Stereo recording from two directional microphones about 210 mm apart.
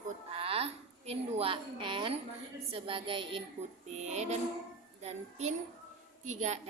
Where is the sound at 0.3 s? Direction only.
30° right (ahead or behind).